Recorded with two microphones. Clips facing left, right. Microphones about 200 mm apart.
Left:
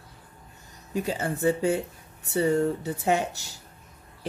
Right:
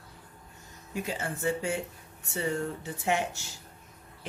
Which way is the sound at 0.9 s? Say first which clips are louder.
Left 6 dB; 35° left (ahead or behind).